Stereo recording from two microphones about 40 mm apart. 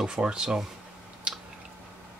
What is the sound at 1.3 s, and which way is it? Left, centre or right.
Chewing, right.